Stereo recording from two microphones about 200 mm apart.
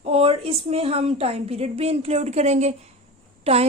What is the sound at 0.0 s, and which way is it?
A woman's voice, 30° right (ahead or behind).